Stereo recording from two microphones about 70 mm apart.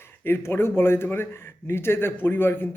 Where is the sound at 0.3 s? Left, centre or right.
Left.